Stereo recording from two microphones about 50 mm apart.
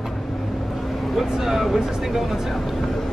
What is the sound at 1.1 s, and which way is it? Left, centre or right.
Speech, centre.